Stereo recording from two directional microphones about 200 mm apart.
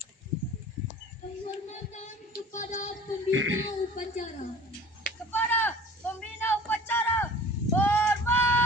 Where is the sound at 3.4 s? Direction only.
80° right.